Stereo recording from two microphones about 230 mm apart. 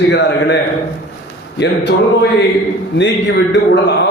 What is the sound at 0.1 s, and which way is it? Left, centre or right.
Speech, left.